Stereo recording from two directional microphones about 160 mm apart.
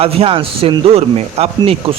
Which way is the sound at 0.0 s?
35° right (ahead or behind).